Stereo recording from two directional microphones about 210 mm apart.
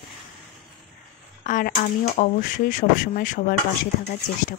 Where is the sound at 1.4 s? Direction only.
35° left (ahead or behind).